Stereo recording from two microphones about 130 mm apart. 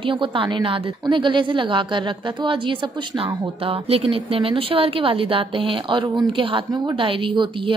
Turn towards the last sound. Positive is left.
turn(degrees=-40)  # may be behind; listen again after turning